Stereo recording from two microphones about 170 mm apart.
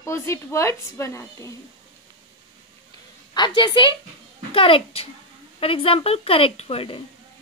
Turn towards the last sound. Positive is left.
turn(degrees=35)  # may be behind; listen again after turning